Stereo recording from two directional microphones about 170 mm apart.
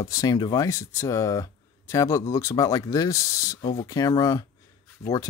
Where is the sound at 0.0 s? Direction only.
20° left (ahead or behind).